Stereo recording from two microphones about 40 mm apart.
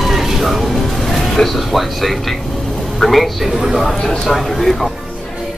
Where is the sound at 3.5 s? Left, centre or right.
Centre.